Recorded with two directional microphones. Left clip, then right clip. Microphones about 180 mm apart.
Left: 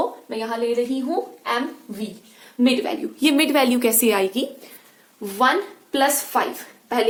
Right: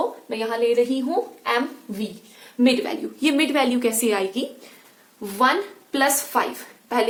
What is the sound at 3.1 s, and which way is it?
A woman's voice, 55° left (ahead or behind).